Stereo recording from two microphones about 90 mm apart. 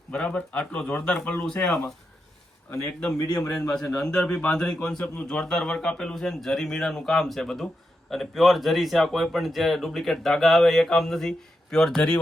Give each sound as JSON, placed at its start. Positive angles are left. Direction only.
{"t": 0.1, "sound": "a man's voice", "side_deg": 15}
{"t": 3.2, "sound": "a man's voice", "side_deg": 30}
{"t": 3.5, "sound": "a man's voice", "side_deg": 10}